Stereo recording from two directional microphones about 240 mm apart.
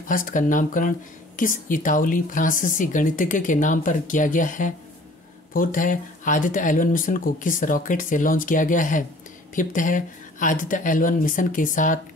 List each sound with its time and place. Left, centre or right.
0.0 s speech: left